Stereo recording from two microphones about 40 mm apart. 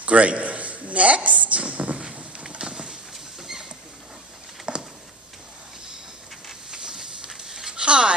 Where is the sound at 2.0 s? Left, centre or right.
Centre.